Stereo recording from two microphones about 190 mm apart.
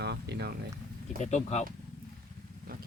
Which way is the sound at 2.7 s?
50° right (ahead or behind).